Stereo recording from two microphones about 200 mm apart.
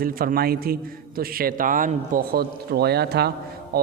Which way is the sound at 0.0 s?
45° right (ahead or behind).